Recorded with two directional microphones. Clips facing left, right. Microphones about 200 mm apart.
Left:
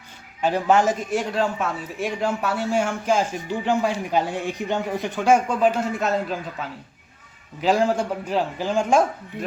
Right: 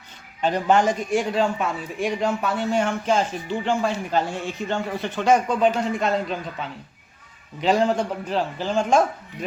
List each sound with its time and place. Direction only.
0.4 s a man's voice: 5° left (ahead or behind)